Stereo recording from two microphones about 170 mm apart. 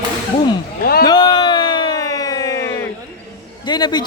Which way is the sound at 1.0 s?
25° left (ahead or behind).